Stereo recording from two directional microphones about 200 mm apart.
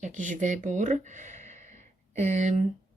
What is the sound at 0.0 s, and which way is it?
Speech, 40° right (ahead or behind).